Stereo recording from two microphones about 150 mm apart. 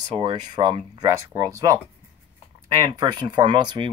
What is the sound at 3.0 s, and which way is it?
Speech, 30° right (ahead or behind).